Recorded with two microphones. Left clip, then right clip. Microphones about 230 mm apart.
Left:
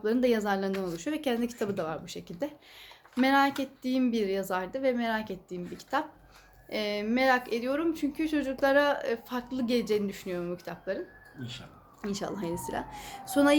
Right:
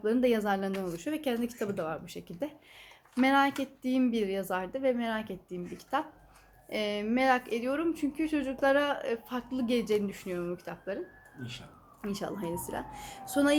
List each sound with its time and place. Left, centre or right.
0.0 s speech: centre
12.0 s speech: centre